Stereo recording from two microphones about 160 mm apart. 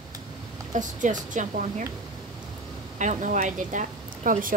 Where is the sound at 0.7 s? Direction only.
50° right (ahead or behind).